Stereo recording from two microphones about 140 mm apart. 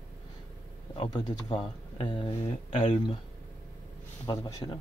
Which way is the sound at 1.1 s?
30° left (ahead or behind).